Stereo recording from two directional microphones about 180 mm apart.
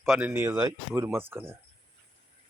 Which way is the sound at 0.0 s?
5° right (ahead or behind).